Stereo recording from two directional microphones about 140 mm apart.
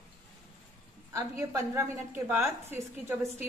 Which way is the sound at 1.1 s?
20° right (ahead or behind).